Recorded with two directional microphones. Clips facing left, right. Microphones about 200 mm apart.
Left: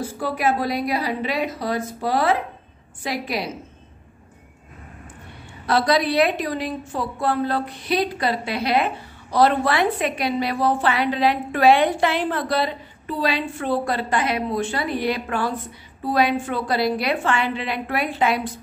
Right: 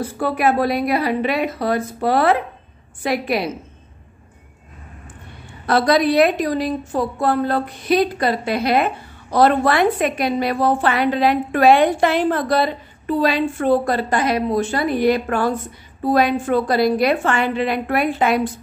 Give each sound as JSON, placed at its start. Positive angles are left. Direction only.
{"t": 0.2, "sound": "a woman's voice", "side_deg": -60}
{"t": 5.7, "sound": "a woman's voice", "side_deg": -50}